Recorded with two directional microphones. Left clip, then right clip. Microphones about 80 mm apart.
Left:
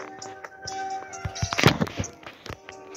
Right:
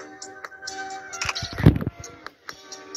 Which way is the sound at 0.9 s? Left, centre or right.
Centre.